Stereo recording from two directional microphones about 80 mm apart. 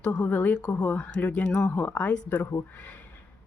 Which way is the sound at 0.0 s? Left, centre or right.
Centre.